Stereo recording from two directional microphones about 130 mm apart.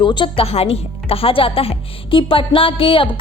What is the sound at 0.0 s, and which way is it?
A woman's voice, 40° left (ahead or behind).